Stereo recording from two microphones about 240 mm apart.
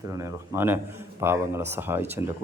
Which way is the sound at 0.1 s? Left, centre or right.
Centre.